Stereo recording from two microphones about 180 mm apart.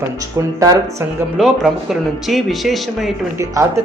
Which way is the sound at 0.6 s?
20° right (ahead or behind).